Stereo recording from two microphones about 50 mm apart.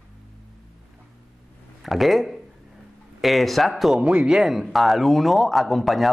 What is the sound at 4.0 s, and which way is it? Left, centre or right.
Speech, right.